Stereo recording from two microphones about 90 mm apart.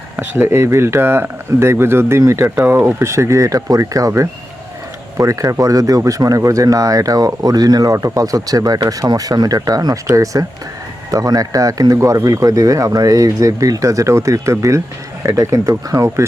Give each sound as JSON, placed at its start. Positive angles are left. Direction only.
{"t": 0.2, "sound": "speech", "side_deg": -25}